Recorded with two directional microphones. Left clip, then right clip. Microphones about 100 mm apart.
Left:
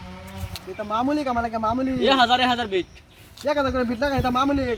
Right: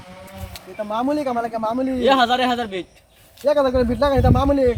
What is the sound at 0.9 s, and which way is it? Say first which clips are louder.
A man's voice: right 2 dB; 40° right (ahead or behind).